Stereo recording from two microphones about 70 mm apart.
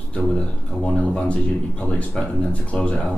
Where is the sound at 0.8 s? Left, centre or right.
Centre.